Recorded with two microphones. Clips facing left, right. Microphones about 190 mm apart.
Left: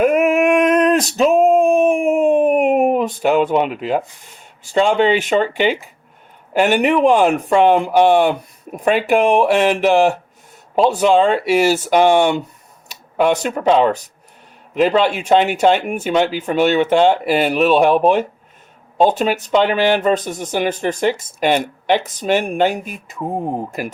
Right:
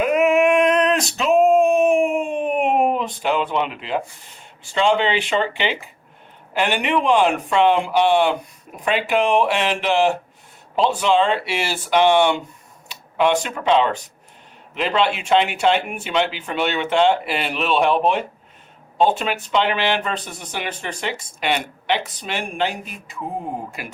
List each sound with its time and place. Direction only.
0.0 s male singing: 50° left (ahead or behind)
1.4 s male singing: centre (ahead or behind)
1.7 s a sound: 50° left (ahead or behind)
4.6 s speech: 45° left (ahead or behind)